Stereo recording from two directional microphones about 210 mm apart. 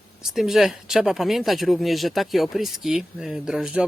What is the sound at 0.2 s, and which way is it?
Speech, centre (ahead or behind).